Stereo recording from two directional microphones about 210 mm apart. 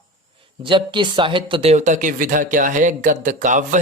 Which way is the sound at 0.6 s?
25° right (ahead or behind).